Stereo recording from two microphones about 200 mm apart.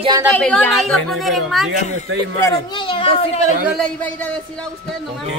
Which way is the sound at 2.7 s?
25° left (ahead or behind).